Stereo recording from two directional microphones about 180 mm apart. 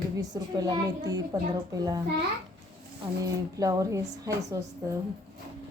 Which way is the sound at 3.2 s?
20° right (ahead or behind).